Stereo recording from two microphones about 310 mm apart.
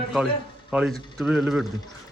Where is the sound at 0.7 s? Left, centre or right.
Centre.